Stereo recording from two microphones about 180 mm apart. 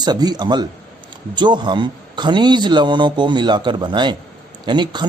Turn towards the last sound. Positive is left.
turn(degrees=-25)  # may be behind; listen again after turning